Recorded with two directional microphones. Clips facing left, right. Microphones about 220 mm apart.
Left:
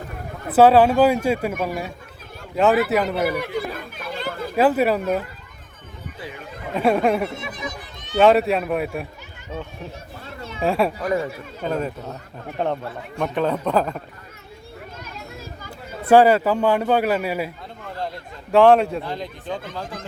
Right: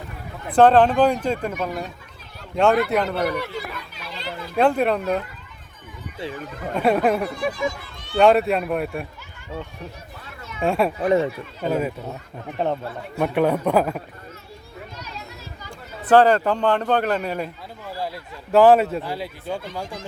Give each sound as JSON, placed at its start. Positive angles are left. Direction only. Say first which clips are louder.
{"t": 0.4, "sound": "speech", "louder": "left 1 dB", "side_deg": 5}
{"t": 3.8, "sound": "a sound", "louder": "left 5 dB", "side_deg": 50}
{"t": 4.5, "sound": "speech", "louder": "left 1 dB", "side_deg": 5}
{"t": 6.7, "sound": "speech", "louder": "left 1 dB", "side_deg": 0}
{"t": 7.3, "sound": "speech", "louder": "right 7 dB", "side_deg": 20}
{"t": 8.2, "sound": "speech", "louder": "left 1 dB", "side_deg": 0}
{"t": 10.6, "sound": "speech", "louder": "even", "side_deg": 0}
{"t": 11.0, "sound": "speech", "louder": "right 4 dB", "side_deg": -25}
{"t": 11.7, "sound": "a man's voice", "louder": "right 2 dB", "side_deg": -5}
{"t": 16.0, "sound": "speech", "louder": "left 1 dB", "side_deg": 10}
{"t": 17.8, "sound": "a man's voice", "louder": "even", "side_deg": -5}